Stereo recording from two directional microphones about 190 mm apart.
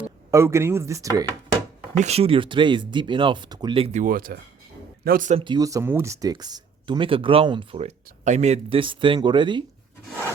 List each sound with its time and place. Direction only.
0.3 s speech: 15° right (ahead or behind)
2.0 s speech: 35° right (ahead or behind)
4.0 s speech: 50° right (ahead or behind)
5.4 s speech: 20° right (ahead or behind)